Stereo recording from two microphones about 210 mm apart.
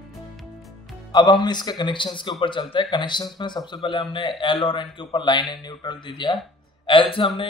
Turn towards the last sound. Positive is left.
turn(degrees=25)  # may be behind; listen again after turning